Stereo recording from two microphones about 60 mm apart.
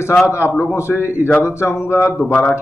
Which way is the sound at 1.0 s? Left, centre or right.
Right.